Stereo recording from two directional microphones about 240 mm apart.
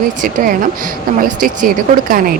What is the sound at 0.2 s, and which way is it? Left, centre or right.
A woman's voice, right.